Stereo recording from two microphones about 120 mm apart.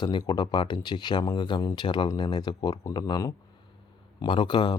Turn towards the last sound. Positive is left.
turn(degrees=40)  # may be behind; listen again after turning